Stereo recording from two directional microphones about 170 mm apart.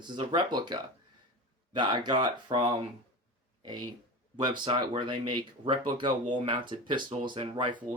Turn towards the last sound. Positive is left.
turn(degrees=-30)  # may be behind; listen again after turning